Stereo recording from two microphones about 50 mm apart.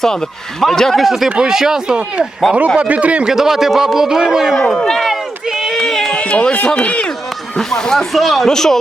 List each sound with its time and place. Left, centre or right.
0.0 s a man's voice: centre
1.9 s speech: right
3.2 s speech: centre
4.7 s run: centre
5.8 s a sound: centre
6.1 s speech: left
7.6 s a man's voice: centre